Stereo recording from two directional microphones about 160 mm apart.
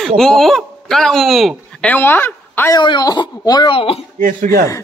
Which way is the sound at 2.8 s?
25° left (ahead or behind).